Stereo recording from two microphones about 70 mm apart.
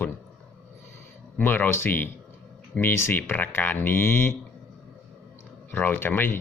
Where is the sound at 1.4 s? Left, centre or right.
Left.